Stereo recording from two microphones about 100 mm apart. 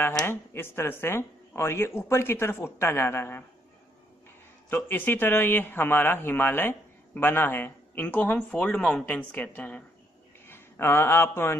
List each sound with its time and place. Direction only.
0.3 s speech: 25° left (ahead or behind)
4.7 s a man's voice: 20° left (ahead or behind)